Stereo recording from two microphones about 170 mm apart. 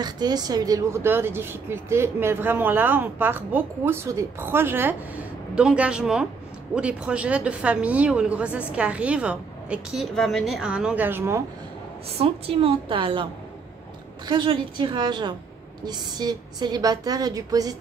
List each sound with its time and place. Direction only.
0.0 s speech: 25° right (ahead or behind)
12.2 s a woman's voice: 35° right (ahead or behind)